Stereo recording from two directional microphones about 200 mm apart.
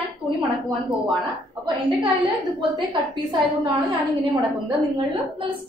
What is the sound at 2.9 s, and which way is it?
Speech, 25° right (ahead or behind).